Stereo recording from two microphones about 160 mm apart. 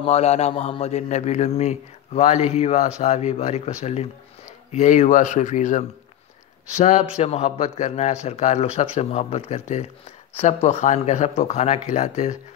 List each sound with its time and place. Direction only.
0.0 s a man's voice: 40° left (ahead or behind)